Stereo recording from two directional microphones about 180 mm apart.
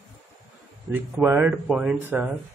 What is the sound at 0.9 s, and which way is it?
Speech, 10° right (ahead or behind).